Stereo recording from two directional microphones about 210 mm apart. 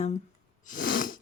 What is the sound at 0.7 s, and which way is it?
Sneeze, 40° left (ahead or behind).